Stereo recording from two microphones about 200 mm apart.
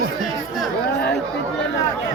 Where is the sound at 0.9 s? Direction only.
60° left (ahead or behind).